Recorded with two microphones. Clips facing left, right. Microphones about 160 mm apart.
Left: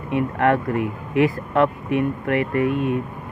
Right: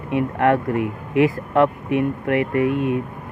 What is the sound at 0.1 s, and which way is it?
Speech, 55° right (ahead or behind).